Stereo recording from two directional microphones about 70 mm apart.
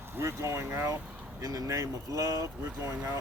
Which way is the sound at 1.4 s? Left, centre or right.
Right.